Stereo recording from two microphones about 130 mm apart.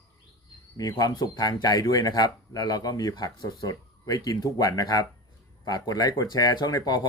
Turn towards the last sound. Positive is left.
turn(degrees=30)  # may be behind; listen again after turning